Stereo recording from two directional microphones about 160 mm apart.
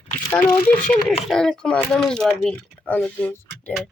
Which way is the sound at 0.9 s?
5° left (ahead or behind).